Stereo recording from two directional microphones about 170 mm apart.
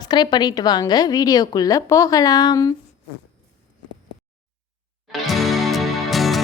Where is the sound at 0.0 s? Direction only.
25° left (ahead or behind).